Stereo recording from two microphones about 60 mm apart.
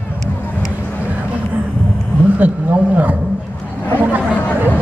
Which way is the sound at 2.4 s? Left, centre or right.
Right.